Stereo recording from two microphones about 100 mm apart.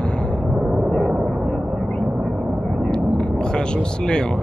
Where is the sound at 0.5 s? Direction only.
10° right (ahead or behind).